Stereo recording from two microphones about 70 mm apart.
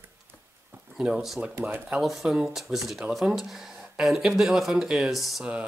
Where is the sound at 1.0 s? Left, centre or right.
Centre.